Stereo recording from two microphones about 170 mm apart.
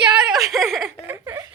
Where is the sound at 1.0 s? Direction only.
15° right (ahead or behind).